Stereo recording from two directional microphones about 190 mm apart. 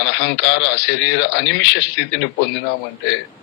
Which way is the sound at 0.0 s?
70° left (ahead or behind).